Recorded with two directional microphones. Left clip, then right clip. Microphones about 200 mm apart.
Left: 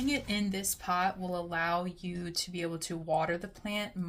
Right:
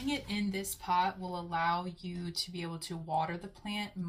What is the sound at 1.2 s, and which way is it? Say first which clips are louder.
Speech: left 1 dB; 45° left (ahead or behind).